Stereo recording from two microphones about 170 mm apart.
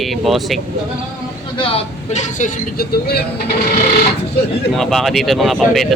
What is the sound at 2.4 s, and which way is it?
Speech, 65° left (ahead or behind).